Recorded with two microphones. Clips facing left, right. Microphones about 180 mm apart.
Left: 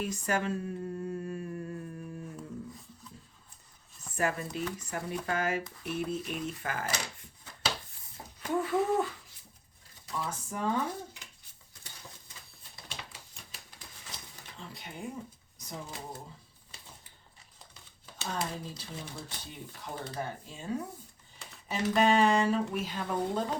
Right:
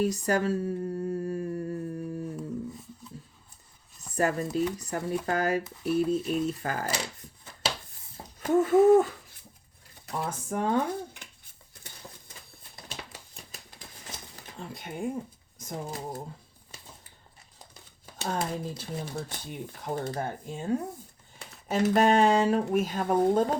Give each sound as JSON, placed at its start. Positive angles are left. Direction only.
{"t": 0.0, "sound": "humming", "side_deg": -40}
{"t": 4.1, "sound": "speech", "side_deg": -40}
{"t": 8.4, "sound": "speech", "side_deg": -45}
{"t": 10.1, "sound": "speech", "side_deg": -55}
{"t": 12.9, "sound": "typewriter", "side_deg": -45}
{"t": 14.1, "sound": "a sound", "side_deg": -45}
{"t": 14.6, "sound": "speech", "side_deg": -50}
{"t": 18.0, "sound": "speech", "side_deg": -50}